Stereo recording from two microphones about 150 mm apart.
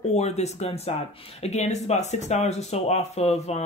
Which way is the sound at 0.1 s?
45° left (ahead or behind).